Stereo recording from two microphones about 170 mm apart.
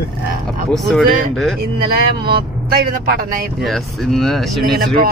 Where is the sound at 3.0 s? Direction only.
60° right (ahead or behind).